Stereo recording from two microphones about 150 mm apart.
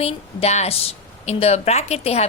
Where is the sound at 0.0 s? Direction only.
45° left (ahead or behind).